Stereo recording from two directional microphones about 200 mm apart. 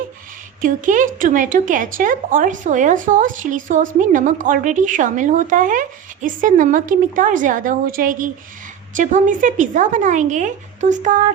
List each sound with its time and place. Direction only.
0.6 s a woman's voice: 40° right (ahead or behind)